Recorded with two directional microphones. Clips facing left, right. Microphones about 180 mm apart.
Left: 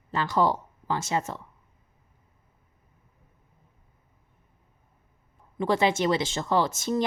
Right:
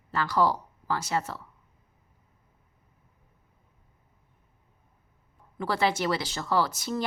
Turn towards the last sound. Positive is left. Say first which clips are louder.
# left 3 dB
turn(degrees=20)  # may be behind; listen again after turning